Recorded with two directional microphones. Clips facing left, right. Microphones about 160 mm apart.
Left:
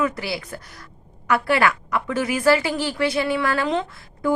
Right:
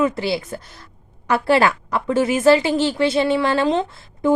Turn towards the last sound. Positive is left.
turn(degrees=-25)  # may be behind; listen again after turning